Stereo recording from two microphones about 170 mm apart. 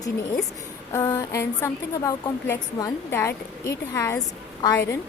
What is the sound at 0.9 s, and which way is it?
A woman's voice, 20° left (ahead or behind).